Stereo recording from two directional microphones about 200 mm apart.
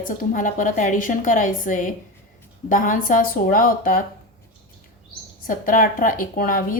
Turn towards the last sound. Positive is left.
turn(degrees=45)  # may be behind; listen again after turning